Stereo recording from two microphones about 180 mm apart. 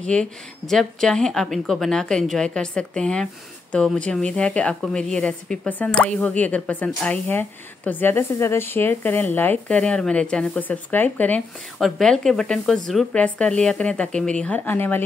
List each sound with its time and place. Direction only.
0.0 s a woman's voice: 5° left (ahead or behind)